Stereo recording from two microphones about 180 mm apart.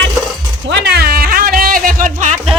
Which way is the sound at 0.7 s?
70° right (ahead or behind).